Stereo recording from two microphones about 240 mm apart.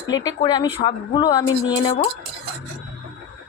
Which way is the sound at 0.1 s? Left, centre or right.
Centre.